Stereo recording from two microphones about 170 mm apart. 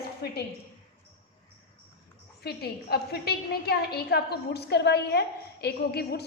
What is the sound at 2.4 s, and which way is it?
A woman's voice, 70° left (ahead or behind).